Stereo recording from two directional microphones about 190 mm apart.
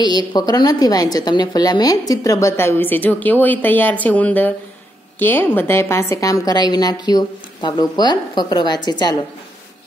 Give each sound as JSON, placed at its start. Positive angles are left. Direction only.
{"t": 0.3, "sound": "a woman's voice", "side_deg": 20}